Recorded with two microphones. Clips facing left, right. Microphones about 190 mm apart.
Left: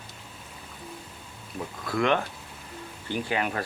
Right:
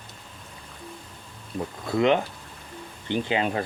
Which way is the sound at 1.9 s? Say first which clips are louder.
Right 4 dB; 20° right (ahead or behind).